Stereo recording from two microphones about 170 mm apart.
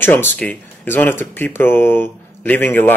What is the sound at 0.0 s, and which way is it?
Speech, 10° left (ahead or behind).